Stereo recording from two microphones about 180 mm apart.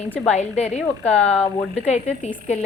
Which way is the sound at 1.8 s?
35° left (ahead or behind).